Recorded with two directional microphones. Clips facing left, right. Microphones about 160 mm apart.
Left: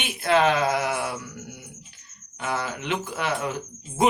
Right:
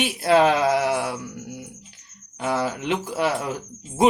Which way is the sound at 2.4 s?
35° right (ahead or behind).